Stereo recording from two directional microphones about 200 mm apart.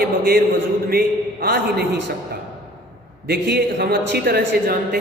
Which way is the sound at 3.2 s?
55° right (ahead or behind).